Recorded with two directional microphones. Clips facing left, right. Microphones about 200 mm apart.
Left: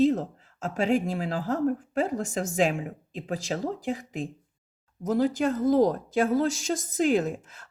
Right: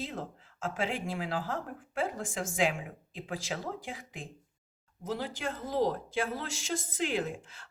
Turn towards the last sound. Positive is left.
turn(degrees=45)  # may be behind; listen again after turning